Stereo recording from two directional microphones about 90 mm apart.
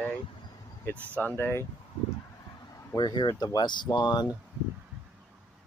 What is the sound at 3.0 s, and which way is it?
Speech, 55° left (ahead or behind).